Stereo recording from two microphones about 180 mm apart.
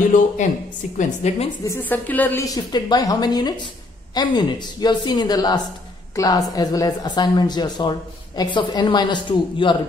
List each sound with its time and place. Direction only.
0.9 s a woman's voice: 35° left (ahead or behind)
1.6 s a woman's voice: 15° left (ahead or behind)